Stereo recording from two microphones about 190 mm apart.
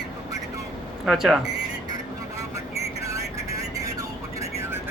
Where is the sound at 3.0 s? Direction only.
15° right (ahead or behind).